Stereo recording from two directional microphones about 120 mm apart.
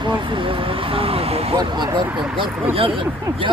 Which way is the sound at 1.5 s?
40° right (ahead or behind).